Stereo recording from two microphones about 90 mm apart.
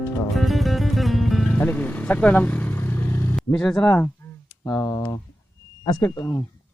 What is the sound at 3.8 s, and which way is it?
Speech, 20° left (ahead or behind).